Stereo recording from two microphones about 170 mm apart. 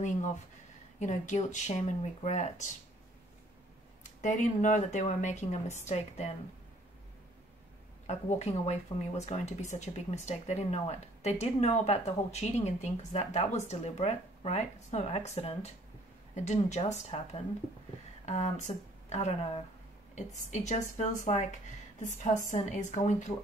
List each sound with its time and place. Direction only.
0.0 s speech: 45° left (ahead or behind)
4.0 s speech: 45° left (ahead or behind)
8.1 s speech: 40° left (ahead or behind)